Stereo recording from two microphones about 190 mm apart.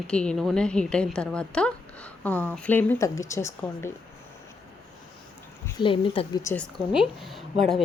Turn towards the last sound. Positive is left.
turn(degrees=0)  # may be behind; listen again after turning